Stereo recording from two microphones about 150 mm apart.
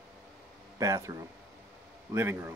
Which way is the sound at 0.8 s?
20° right (ahead or behind).